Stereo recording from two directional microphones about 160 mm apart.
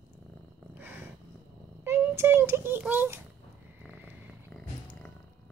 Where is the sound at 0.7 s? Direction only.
15° right (ahead or behind).